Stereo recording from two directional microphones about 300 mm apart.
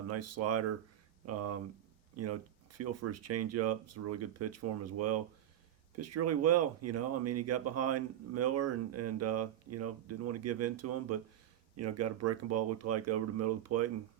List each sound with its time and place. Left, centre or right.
0.1 s speech: right